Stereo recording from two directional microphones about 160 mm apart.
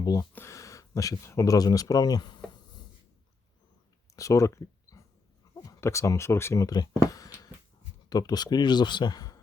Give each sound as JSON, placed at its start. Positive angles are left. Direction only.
{"t": 0.0, "sound": "speech", "side_deg": 20}
{"t": 4.1, "sound": "a sound", "side_deg": 20}
{"t": 5.5, "sound": "speech", "side_deg": 20}